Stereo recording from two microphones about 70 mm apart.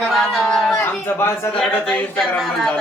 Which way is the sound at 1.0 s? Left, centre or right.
Left.